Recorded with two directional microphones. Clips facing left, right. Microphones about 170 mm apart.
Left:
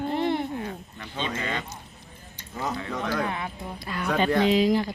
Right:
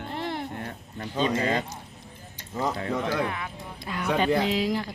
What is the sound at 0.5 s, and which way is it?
A man's voice, 40° right (ahead or behind).